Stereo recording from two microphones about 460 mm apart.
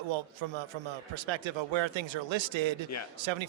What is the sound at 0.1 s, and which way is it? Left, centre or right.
A man's voice, right.